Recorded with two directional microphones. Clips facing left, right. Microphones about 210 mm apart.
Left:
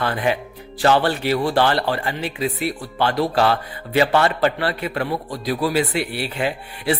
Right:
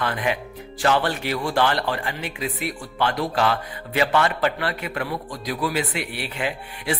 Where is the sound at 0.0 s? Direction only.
35° left (ahead or behind).